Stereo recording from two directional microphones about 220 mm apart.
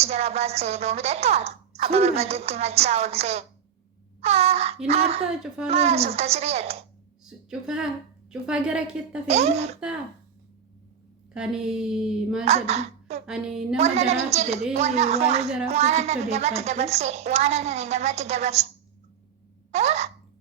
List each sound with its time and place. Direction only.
0.0 s speech: 30° right (ahead or behind)
5.3 s a woman's voice: 5° right (ahead or behind)
5.6 s speech: 30° right (ahead or behind)
7.3 s a woman's voice: 5° right (ahead or behind)
9.2 s speech: 30° right (ahead or behind)
11.3 s a woman's voice: 5° right (ahead or behind)
12.5 s a woman's voice: 30° right (ahead or behind)
13.2 s a woman's voice: centre (ahead or behind)
13.7 s speech: 30° right (ahead or behind)
19.7 s a sound: 30° right (ahead or behind)